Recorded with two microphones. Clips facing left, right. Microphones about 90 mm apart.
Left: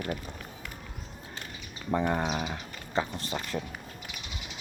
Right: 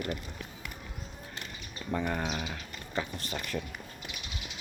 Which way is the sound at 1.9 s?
20° left (ahead or behind).